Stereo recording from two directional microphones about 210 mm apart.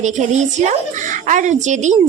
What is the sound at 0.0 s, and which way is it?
A woman's voice, 35° right (ahead or behind).